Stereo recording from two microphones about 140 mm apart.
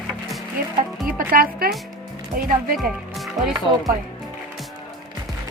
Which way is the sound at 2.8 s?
Centre (ahead or behind).